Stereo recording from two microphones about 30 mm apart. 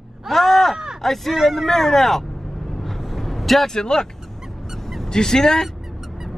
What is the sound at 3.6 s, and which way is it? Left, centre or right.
Speech, left.